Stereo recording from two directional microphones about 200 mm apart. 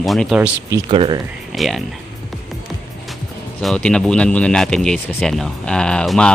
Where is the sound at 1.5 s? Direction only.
Centre (ahead or behind).